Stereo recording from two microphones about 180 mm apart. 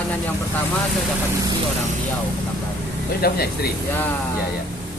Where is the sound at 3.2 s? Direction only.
60° left (ahead or behind).